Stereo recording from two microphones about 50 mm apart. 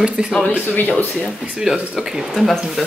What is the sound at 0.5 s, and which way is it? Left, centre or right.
Speech, left.